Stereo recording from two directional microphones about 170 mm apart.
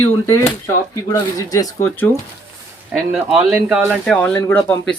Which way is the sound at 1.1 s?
20° left (ahead or behind).